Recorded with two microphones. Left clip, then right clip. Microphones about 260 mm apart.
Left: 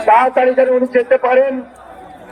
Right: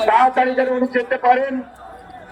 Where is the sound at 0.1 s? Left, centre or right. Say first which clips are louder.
Left 6 dB; left.